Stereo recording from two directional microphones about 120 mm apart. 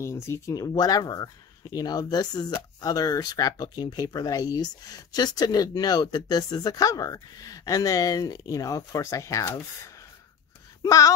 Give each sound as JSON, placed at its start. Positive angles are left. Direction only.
{"t": 0.0, "sound": "speech", "side_deg": 20}